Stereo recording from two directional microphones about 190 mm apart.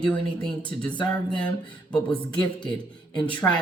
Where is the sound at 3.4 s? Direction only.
10° left (ahead or behind).